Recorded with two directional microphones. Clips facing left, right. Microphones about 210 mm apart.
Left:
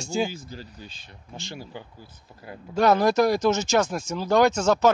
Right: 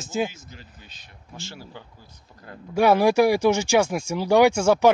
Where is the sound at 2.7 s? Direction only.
10° right (ahead or behind).